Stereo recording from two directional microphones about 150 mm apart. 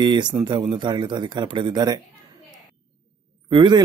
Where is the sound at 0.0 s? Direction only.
30° right (ahead or behind).